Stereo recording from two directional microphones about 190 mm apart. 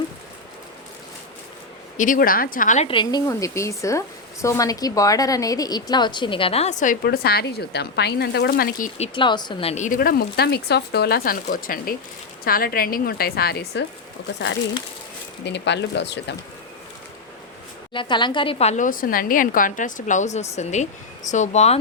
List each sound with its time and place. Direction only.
2.0 s a woman's voice: 45° left (ahead or behind)
9.0 s a woman's voice: 25° left (ahead or behind); by 13.8 s 55° left (ahead or behind)
15.4 s speech: 65° left (ahead or behind)
17.9 s a woman's voice: 25° left (ahead or behind)